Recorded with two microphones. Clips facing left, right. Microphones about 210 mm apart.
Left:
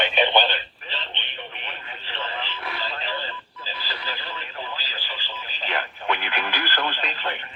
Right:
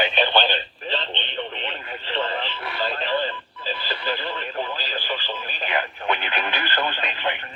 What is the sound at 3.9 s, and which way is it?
Radio, 55° right (ahead or behind).